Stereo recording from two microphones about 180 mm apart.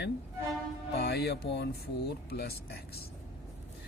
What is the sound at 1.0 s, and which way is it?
Speech, 65° left (ahead or behind).